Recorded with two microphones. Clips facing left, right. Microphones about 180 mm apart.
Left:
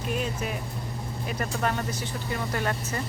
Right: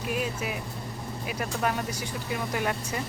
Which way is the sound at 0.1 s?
5° right (ahead or behind).